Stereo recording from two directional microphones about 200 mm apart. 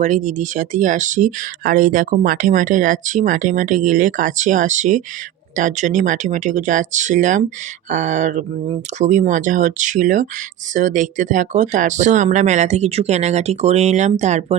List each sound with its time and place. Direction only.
0.0 s speech: 35° right (ahead or behind)